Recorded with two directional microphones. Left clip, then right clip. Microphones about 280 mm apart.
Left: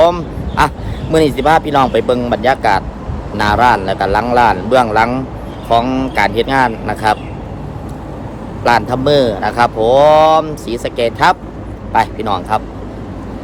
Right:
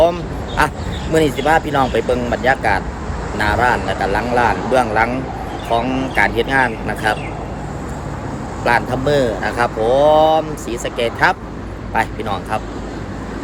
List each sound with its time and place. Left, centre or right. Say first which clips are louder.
0.0 s a man's voice: left 3 dB; centre
8.6 s a man's voice: left 4 dB; centre